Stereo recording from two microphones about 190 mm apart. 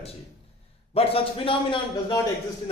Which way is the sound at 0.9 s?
30° left (ahead or behind).